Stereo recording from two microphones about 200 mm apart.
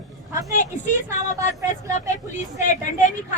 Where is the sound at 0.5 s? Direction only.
40° left (ahead or behind).